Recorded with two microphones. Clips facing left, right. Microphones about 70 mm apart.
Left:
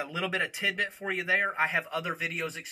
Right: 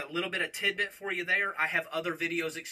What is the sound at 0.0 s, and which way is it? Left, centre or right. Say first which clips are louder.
Speech: left 2 dB; centre.